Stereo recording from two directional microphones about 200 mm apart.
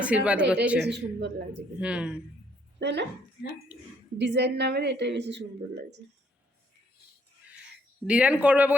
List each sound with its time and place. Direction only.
0.0 s a woman's voice: 5° right (ahead or behind)
0.9 s a woman's voice: 60° right (ahead or behind)
1.8 s speech: 5° right (ahead or behind)
2.7 s speech: 60° right (ahead or behind)
4.2 s a woman's voice: 60° right (ahead or behind)
8.0 s a woman's voice: 5° right (ahead or behind)